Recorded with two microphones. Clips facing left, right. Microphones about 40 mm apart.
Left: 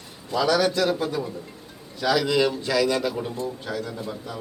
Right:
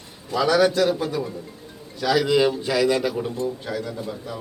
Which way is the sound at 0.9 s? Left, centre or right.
Centre.